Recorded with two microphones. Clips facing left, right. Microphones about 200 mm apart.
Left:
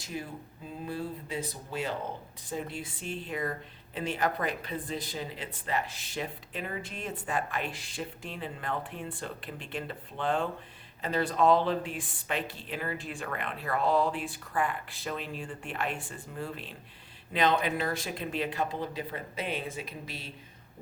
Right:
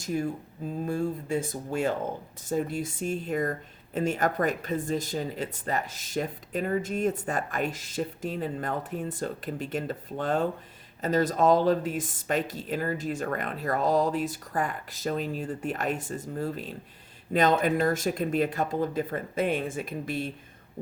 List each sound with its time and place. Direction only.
0.0 s speech: 45° right (ahead or behind)